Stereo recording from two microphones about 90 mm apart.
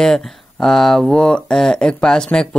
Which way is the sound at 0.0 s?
5° left (ahead or behind).